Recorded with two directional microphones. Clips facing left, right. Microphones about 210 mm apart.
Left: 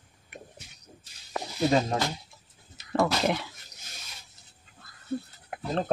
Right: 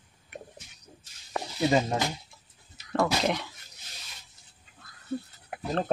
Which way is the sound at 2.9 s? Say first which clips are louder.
Left 1 dB; 5° left (ahead or behind).